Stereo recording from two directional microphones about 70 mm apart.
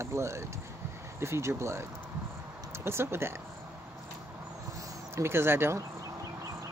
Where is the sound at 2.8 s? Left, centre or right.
Right.